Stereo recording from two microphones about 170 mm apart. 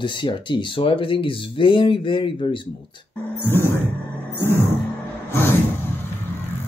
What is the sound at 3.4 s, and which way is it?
Music, 15° left (ahead or behind).